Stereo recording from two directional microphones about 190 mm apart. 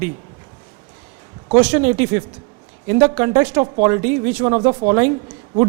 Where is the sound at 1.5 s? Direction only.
10° right (ahead or behind).